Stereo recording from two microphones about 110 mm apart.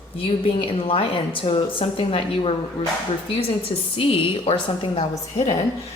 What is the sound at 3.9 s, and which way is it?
A woman's voice, 55° left (ahead or behind).